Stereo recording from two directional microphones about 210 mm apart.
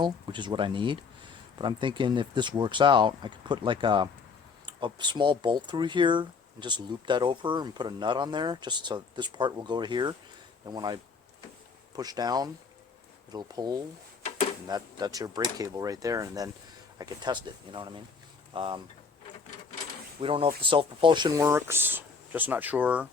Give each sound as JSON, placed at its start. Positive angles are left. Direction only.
{"t": 0.0, "sound": "speech", "side_deg": -20}
{"t": 20.2, "sound": "speech", "side_deg": -25}